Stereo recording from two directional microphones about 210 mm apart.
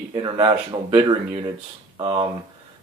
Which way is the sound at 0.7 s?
20° right (ahead or behind).